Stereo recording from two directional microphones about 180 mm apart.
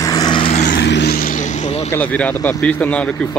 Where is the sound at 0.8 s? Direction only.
70° left (ahead or behind); by 1.9 s 40° left (ahead or behind).